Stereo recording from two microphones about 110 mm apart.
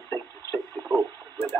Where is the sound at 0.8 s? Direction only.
40° right (ahead or behind).